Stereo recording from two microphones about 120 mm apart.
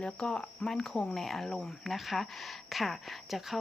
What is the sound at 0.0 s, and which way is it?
Speech, 5° left (ahead or behind).